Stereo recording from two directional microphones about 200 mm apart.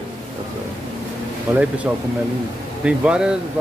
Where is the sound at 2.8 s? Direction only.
5° right (ahead or behind).